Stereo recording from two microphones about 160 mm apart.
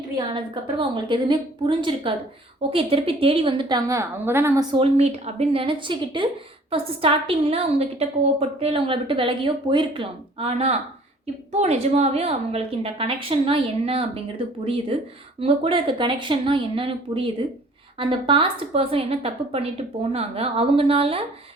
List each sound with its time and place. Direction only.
0.2 s a woman's voice: 30° right (ahead or behind); by 4.6 s 15° right (ahead or behind)
4.7 s a woman's voice: 40° right (ahead or behind)